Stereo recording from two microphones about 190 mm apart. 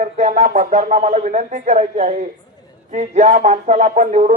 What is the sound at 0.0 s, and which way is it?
Speech, 35° right (ahead or behind).